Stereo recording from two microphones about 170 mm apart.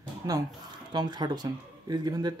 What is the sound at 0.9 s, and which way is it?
Speech, 25° right (ahead or behind).